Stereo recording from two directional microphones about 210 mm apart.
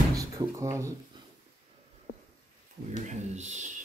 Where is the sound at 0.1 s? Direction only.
15° right (ahead or behind).